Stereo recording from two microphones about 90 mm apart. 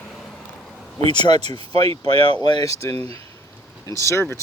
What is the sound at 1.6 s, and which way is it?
Speech, 90° right.